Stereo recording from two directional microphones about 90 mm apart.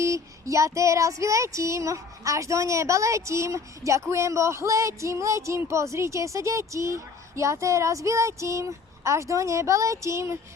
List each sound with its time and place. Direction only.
0.0 s female singing: 35° right (ahead or behind)